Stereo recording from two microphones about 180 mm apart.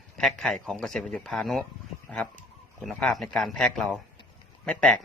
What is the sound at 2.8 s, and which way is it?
A man's voice, 5° left (ahead or behind).